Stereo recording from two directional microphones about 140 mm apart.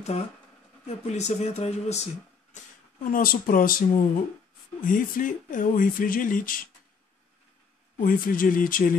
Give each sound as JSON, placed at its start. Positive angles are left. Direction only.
{"t": 0.8, "sound": "speech", "side_deg": 55}
{"t": 2.5, "sound": "speech", "side_deg": 75}
{"t": 4.8, "sound": "speech", "side_deg": 75}
{"t": 8.0, "sound": "speech", "side_deg": 80}